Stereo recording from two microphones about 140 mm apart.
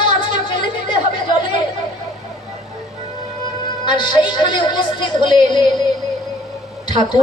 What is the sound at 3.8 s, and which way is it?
A woman's voice, 35° left (ahead or behind).